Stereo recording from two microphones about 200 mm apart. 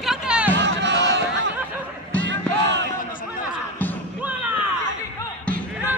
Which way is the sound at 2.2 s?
65° right (ahead or behind).